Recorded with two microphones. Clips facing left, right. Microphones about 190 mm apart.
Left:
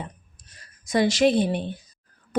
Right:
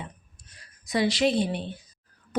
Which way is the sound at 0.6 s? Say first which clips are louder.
Left 3 dB; 45° left (ahead or behind).